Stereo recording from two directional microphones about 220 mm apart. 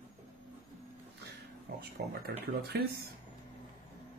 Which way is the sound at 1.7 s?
50° right (ahead or behind).